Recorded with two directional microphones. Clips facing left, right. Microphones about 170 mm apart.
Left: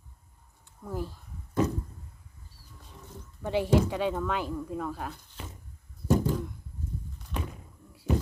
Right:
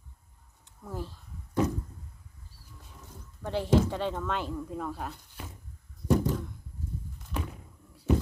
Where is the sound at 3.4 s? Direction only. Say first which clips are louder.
Left 1 dB; 5° left (ahead or behind).